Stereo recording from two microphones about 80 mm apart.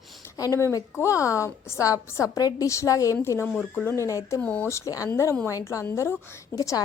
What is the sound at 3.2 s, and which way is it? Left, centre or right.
Speech, left.